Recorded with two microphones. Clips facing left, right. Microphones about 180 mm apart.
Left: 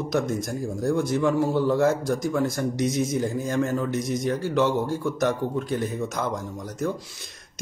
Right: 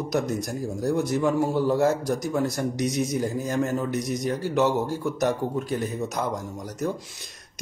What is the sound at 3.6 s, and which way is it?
Speech, 20° right (ahead or behind).